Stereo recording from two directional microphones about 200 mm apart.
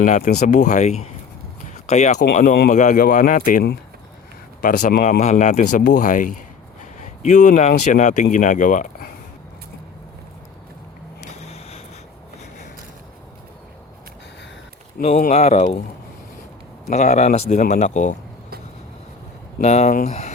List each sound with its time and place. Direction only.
0.0 s speech: 40° left (ahead or behind)
1.7 s a sound: 35° left (ahead or behind)
2.1 s speech: 50° left (ahead or behind)
5.2 s speech: 35° left (ahead or behind)
11.3 s a sound: 30° left (ahead or behind)
15.0 s speech: 35° left (ahead or behind)
16.9 s speech: 35° left (ahead or behind)
19.5 s speech: 35° left (ahead or behind)